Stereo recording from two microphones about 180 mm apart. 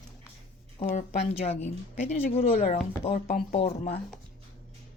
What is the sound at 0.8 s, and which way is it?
Speech, 40° left (ahead or behind).